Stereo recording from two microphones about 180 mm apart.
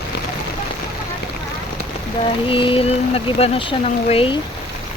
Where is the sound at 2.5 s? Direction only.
30° left (ahead or behind).